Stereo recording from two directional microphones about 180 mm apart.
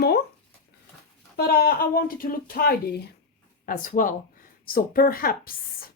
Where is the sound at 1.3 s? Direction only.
60° left (ahead or behind).